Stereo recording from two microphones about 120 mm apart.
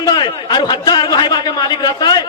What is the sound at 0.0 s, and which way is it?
A man's voice, 35° left (ahead or behind).